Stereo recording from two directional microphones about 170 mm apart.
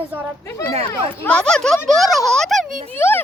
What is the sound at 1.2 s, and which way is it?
A woman's voice, 5° left (ahead or behind).